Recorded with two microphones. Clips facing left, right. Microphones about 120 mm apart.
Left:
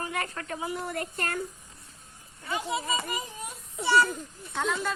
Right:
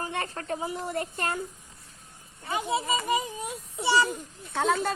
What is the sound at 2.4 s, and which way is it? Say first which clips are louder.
Speech: right 2 dB; 20° right (ahead or behind).